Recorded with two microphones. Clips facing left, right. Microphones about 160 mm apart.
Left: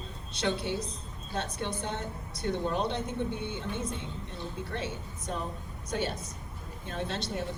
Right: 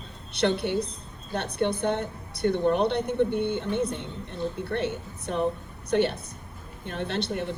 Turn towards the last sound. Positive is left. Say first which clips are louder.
# right 5 dB
turn(degrees=-60)  # may be behind; listen again after turning